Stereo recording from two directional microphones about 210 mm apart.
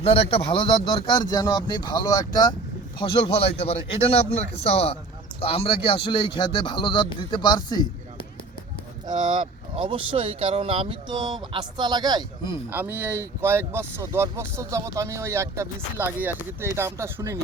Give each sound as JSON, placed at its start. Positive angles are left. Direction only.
{"t": 0.0, "sound": "a man's voice", "side_deg": 30}
{"t": 9.2, "sound": "speech", "side_deg": -25}
{"t": 12.7, "sound": "speech", "side_deg": -10}